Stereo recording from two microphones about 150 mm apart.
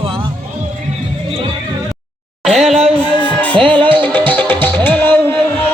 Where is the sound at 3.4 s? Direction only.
10° left (ahead or behind).